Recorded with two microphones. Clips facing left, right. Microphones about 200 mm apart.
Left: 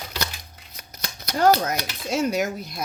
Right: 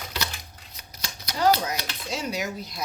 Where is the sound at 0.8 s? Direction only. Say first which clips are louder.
Left 3 dB; 50° left (ahead or behind).